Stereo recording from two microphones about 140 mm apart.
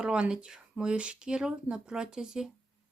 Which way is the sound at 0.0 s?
5° right (ahead or behind).